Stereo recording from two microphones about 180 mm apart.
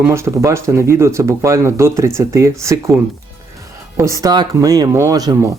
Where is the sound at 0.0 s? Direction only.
15° right (ahead or behind).